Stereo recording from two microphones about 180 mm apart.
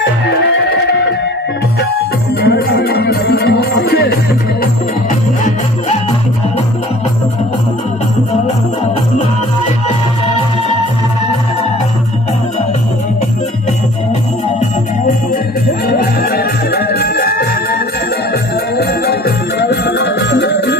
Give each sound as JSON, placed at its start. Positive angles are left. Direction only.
{"t": 2.4, "sound": "music", "side_deg": 60}
{"t": 15.9, "sound": "music", "side_deg": 60}